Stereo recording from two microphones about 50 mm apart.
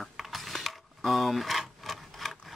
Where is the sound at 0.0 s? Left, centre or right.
Centre.